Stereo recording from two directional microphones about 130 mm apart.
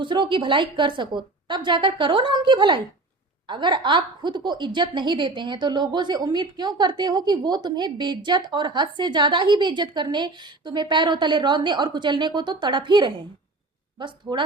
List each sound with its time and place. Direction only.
0.0 s a woman's voice: 40° right (ahead or behind)